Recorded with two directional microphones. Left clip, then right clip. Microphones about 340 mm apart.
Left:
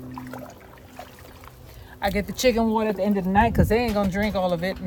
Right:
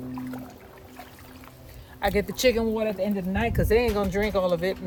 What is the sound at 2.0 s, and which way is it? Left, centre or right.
Speech, centre.